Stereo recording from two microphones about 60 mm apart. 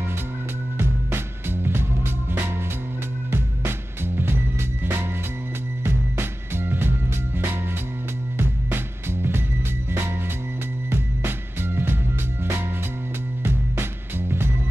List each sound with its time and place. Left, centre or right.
0.7 s music: right
8.6 s music: right
10.9 s music: right
13.4 s music: right